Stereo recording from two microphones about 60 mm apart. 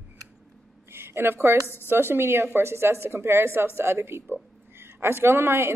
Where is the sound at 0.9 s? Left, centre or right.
Right.